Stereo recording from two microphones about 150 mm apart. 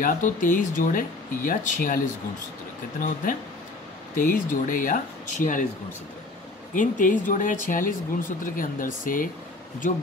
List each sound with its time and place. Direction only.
0.0 s speech: 60° left (ahead or behind)
3.0 s speech: 60° left (ahead or behind)
6.7 s speech: 60° left (ahead or behind)